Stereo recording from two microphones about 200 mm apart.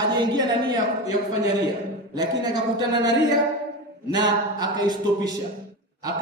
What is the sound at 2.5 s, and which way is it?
A man's voice, 20° right (ahead or behind).